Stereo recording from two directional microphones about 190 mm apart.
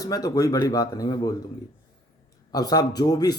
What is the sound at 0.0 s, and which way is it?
A man's voice, 20° left (ahead or behind).